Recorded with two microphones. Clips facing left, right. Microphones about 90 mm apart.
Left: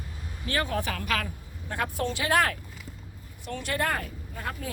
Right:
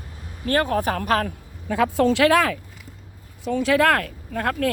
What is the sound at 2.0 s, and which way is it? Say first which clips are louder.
Speech: right 12 dB; 90° right.